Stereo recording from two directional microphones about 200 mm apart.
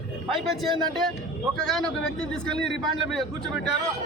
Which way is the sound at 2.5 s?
60° right (ahead or behind).